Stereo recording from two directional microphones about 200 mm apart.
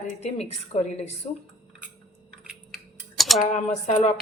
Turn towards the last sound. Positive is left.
turn(degrees=35)  # may be behind; listen again after turning